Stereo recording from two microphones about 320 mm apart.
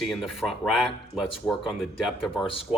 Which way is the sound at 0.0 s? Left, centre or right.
Centre.